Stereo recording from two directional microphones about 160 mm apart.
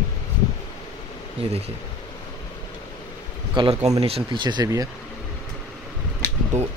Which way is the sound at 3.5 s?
30° right (ahead or behind).